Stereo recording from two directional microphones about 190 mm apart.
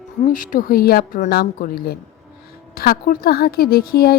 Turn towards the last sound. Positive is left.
turn(degrees=55)  # may be behind; listen again after turning